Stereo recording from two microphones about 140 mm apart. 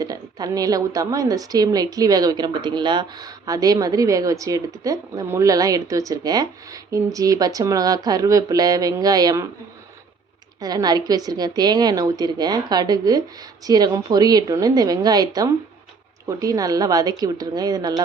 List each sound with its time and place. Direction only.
0.0 s a woman's voice: 25° right (ahead or behind)
10.6 s a woman's voice: 30° right (ahead or behind)